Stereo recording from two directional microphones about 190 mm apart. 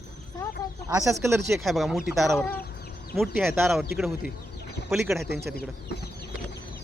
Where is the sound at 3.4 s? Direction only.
10° right (ahead or behind).